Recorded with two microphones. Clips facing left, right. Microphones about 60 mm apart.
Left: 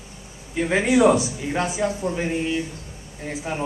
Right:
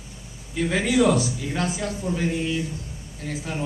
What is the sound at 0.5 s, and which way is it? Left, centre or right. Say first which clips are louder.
A man's voice: left 2 dB; left.